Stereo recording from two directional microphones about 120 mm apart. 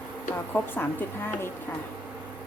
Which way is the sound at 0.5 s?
15° left (ahead or behind).